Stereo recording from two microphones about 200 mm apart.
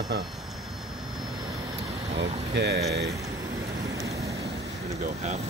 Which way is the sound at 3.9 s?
20° right (ahead or behind).